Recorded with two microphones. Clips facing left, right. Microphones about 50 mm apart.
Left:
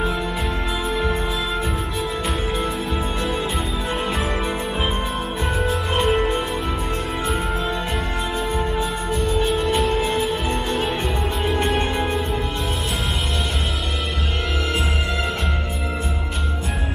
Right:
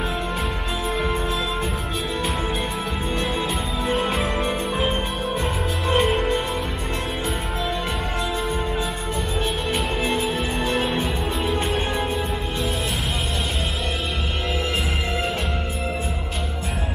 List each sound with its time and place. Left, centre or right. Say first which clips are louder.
4.0 s music: right 1 dB; centre
5.6 s music: even; centre
11.4 s music: left 3 dB; left